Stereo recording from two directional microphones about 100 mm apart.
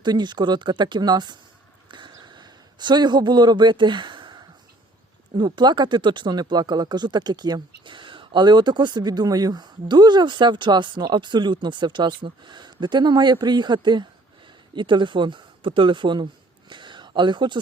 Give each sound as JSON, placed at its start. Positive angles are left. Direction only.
{"t": 0.0, "sound": "speech", "side_deg": -50}
{"t": 1.9, "sound": "a sound", "side_deg": -50}
{"t": 5.4, "sound": "speech", "side_deg": -50}